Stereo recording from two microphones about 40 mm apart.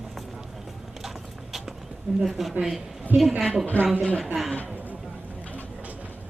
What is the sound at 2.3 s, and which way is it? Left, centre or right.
Speech, centre.